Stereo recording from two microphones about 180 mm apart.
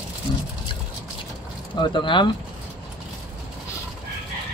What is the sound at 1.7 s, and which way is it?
Speech, 25° left (ahead or behind).